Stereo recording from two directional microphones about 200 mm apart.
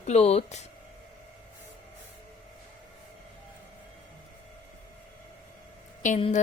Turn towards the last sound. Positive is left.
turn(degrees=30)  # may be behind; listen again after turning